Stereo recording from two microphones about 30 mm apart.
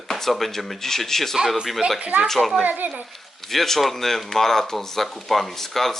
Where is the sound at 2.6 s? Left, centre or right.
Right.